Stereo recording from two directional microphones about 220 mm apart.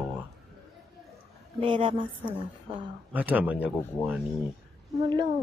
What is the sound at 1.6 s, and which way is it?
Speech, 25° right (ahead or behind).